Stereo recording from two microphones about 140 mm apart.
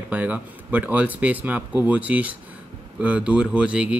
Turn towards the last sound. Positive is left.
turn(degrees=-10)  # may be behind; listen again after turning